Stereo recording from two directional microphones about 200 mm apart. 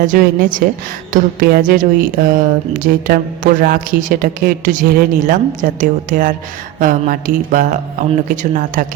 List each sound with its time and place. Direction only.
0.0 s speech: 45° right (ahead or behind)